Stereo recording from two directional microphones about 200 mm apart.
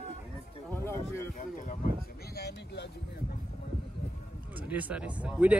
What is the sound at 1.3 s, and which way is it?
Speech, 40° left (ahead or behind).